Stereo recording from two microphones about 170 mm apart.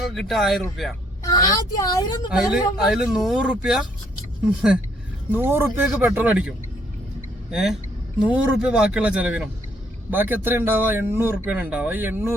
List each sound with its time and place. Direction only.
0.1 s speech: centre (ahead or behind)
1.2 s a woman's voice: 20° left (ahead or behind)
2.3 s speech: 5° right (ahead or behind)
7.5 s speech: centre (ahead or behind)